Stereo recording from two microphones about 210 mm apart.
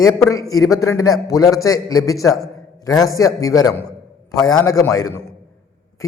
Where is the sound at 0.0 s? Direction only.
15° left (ahead or behind).